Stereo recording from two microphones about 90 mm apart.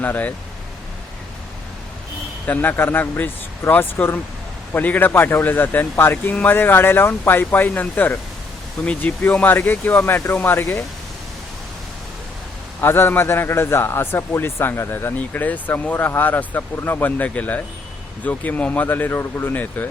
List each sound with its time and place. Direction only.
0.0 s speech: 20° left (ahead or behind)
2.5 s a man's voice: 20° left (ahead or behind)
12.8 s a man's voice: 25° left (ahead or behind)